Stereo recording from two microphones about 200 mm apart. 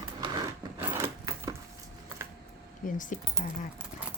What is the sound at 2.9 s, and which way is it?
Speech, 40° left (ahead or behind).